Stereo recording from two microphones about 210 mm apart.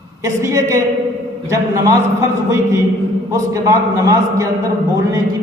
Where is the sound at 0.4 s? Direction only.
15° right (ahead or behind).